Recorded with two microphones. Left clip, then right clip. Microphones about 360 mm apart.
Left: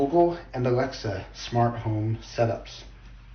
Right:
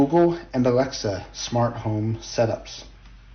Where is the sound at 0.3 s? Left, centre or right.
Centre.